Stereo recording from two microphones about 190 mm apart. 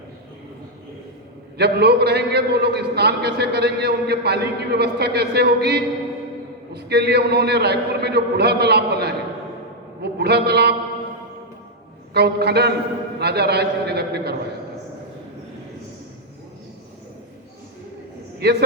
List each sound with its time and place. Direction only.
1.5 s a man's voice: 60° right (ahead or behind)
12.1 s a man's voice: 60° right (ahead or behind)
18.4 s a man's voice: 55° right (ahead or behind)